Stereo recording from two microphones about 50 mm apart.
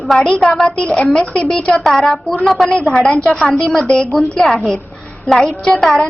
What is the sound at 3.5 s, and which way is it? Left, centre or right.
Speech, centre.